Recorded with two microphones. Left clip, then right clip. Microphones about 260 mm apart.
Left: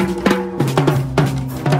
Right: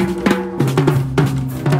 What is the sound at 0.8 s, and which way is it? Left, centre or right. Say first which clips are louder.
Drum: left 1 dB; centre.